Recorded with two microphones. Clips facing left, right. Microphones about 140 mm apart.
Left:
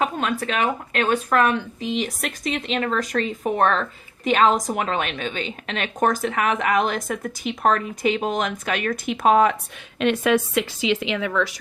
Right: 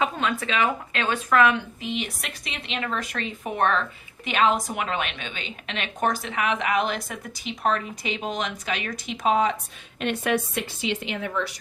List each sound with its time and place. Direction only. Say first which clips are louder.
0.0 s speech: left 2 dB; 50° left (ahead or behind)
10.0 s a woman's voice: left 6 dB; 90° left